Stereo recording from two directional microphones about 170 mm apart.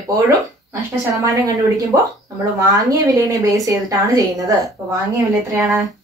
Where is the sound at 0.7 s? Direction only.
20° right (ahead or behind).